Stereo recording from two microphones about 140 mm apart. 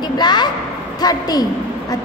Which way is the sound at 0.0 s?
30° left (ahead or behind).